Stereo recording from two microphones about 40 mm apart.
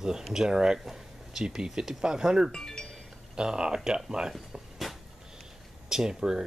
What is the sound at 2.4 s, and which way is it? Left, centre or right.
Speech, centre.